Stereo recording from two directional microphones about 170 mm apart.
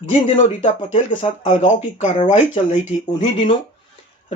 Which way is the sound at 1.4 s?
45° left (ahead or behind).